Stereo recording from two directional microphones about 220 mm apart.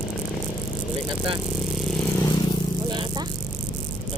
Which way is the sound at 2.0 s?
15° left (ahead or behind).